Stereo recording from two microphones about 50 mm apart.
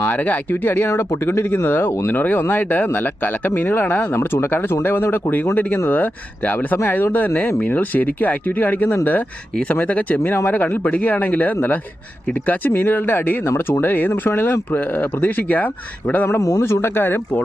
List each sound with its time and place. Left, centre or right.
0.0 s speech: left
0.9 s speech: left
4.1 s speech: left
10.2 s speech: left
10.5 s speech: left
12.7 s speech: left
14.1 s speech: left
14.7 s speech: left
16.4 s speech: left